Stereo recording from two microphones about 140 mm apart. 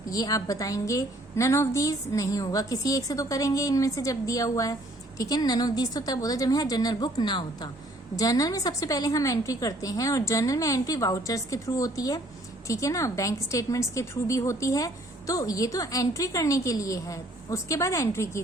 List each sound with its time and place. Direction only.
0.1 s a woman's voice: 25° left (ahead or behind)